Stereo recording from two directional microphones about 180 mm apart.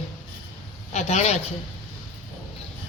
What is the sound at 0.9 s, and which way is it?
Speech, 40° left (ahead or behind).